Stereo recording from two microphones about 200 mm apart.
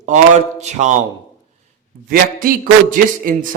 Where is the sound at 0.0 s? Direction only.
35° right (ahead or behind).